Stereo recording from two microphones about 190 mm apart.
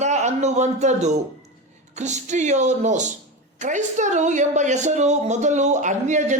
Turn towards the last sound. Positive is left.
turn(degrees=-40)  # may be behind; listen again after turning